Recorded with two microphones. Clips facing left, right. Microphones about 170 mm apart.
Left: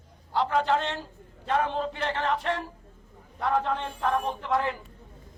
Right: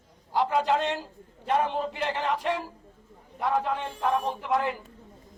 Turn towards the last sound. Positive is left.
turn(degrees=-10)  # may be behind; listen again after turning